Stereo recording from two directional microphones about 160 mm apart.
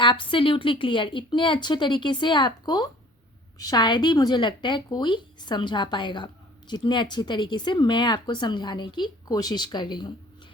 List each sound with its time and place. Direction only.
0.0 s a woman's voice: 30° left (ahead or behind)